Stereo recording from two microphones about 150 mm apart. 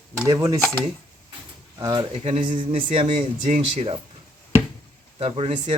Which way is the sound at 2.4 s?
35° right (ahead or behind).